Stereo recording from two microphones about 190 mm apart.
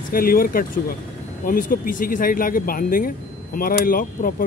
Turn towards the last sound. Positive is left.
turn(degrees=50)  # may be behind; listen again after turning